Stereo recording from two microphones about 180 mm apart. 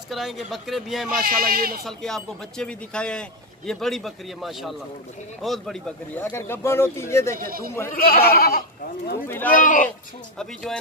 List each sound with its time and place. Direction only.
0.1 s speech: centre (ahead or behind)
1.2 s a man's voice: 55° right (ahead or behind)
1.9 s speech: centre (ahead or behind)
7.3 s a man's voice: 55° right (ahead or behind)
7.9 s speech: 55° left (ahead or behind)
9.5 s speech: 45° left (ahead or behind)
10.4 s speech: 5° left (ahead or behind)